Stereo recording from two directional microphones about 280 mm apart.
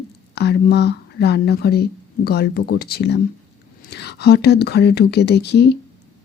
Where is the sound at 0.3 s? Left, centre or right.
Left.